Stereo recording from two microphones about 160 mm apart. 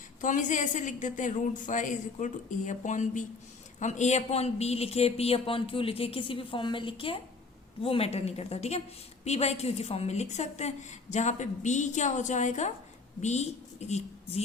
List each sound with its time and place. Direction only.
0.2 s a woman's voice: 50° left (ahead or behind)